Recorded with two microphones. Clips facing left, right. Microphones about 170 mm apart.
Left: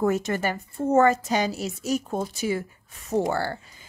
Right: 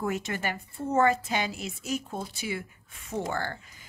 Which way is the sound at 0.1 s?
40° left (ahead or behind).